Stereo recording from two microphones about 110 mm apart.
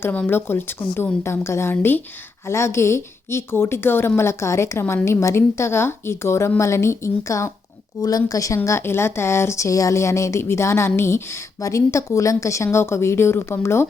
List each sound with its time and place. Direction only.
0.0 s a woman's voice: 15° left (ahead or behind)